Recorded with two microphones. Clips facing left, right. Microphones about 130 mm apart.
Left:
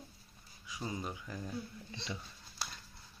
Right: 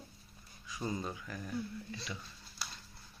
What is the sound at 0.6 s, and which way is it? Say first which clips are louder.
Speech: right 2 dB; 15° left (ahead or behind).